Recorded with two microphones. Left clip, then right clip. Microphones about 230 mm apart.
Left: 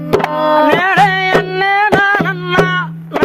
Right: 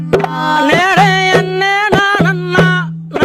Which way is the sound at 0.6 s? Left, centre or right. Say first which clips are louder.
Right 1 dB; right.